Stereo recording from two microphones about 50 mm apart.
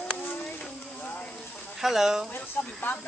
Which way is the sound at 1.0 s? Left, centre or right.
Left.